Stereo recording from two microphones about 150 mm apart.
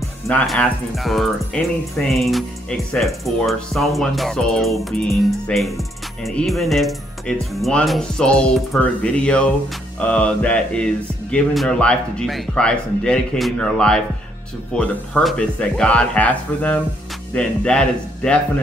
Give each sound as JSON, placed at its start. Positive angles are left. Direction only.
{"t": 0.3, "sound": "speech", "side_deg": 5}